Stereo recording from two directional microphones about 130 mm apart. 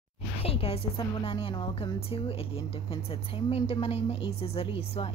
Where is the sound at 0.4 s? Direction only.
50° left (ahead or behind).